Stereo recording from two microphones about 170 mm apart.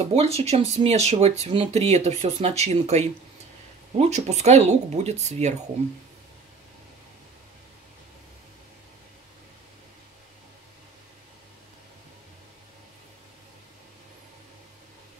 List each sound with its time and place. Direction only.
0.1 s speech: 35° right (ahead or behind)